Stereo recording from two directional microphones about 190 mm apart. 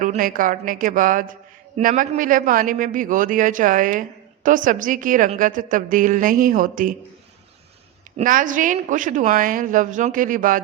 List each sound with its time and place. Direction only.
0.0 s a woman's voice: 45° right (ahead or behind)
8.2 s a woman's voice: 45° right (ahead or behind)